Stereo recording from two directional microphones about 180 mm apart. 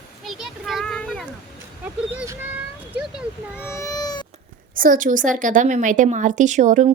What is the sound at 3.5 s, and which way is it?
Speech, 15° left (ahead or behind).